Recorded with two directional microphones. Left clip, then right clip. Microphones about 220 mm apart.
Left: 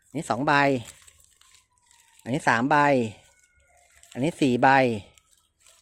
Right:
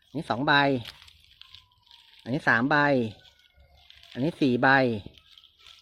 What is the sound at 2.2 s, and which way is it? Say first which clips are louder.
Speech: left 1 dB; 10° left (ahead or behind).